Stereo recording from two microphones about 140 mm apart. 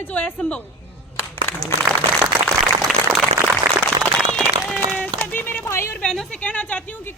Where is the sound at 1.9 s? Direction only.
25° right (ahead or behind).